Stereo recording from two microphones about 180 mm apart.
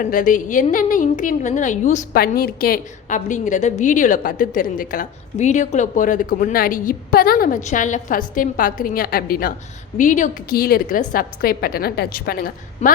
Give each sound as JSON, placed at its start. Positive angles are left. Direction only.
{"t": 0.0, "sound": "a woman's voice", "side_deg": 50}
{"t": 2.1, "sound": "a woman's voice", "side_deg": 60}